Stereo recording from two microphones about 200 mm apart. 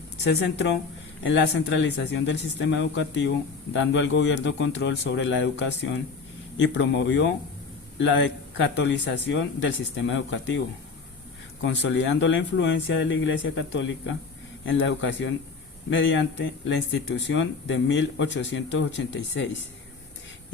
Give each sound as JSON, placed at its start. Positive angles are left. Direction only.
{"t": 0.3, "sound": "speech", "side_deg": 65}
{"t": 1.7, "sound": "speech", "side_deg": 65}
{"t": 11.6, "sound": "speech", "side_deg": 65}